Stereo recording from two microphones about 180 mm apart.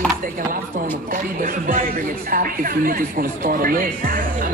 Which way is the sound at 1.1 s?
50° right (ahead or behind).